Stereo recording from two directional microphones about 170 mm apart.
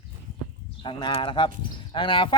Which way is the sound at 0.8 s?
25° left (ahead or behind).